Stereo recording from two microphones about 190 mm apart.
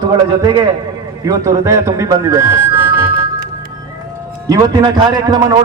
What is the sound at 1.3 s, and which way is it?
Speech, 15° right (ahead or behind).